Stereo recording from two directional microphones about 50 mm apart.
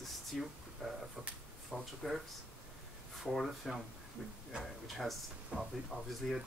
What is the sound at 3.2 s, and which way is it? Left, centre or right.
Speech, centre.